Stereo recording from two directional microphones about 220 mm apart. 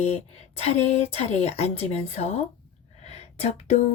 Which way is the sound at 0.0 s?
30° left (ahead or behind).